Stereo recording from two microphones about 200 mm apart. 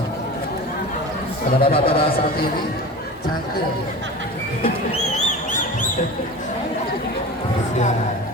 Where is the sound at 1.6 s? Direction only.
25° left (ahead or behind).